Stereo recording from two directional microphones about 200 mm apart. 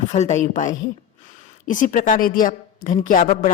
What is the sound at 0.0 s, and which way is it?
A man's voice, 35° left (ahead or behind).